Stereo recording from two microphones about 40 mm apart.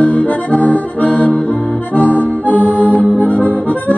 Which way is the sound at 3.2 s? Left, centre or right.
Left.